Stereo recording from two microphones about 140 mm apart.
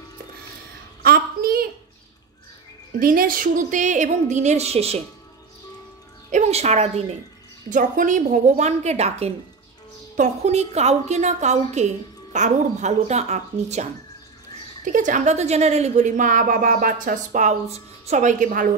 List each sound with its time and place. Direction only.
1.0 s a sound: 90° right
3.0 s speech: 90° right; by 5.0 s 50° right (ahead or behind)
6.3 s speech: 55° right (ahead or behind)
7.7 s speech: 65° right (ahead or behind)
14.9 s speech: 65° right (ahead or behind)